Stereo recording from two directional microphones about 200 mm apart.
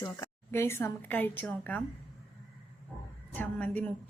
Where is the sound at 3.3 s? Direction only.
5° left (ahead or behind).